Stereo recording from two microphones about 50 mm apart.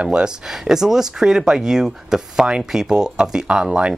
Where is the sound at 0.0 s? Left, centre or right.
Centre.